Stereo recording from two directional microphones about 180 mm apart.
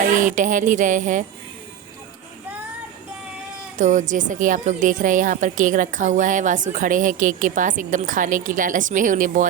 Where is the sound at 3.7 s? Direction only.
45° right (ahead or behind).